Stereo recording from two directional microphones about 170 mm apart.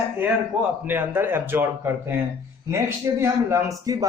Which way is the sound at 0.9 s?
10° right (ahead or behind).